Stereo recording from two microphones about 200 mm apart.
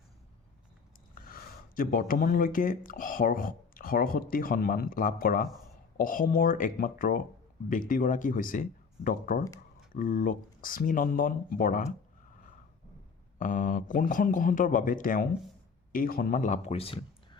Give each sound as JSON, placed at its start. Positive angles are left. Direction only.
{"t": 1.3, "sound": "speech", "side_deg": 45}
{"t": 13.4, "sound": "speech", "side_deg": 40}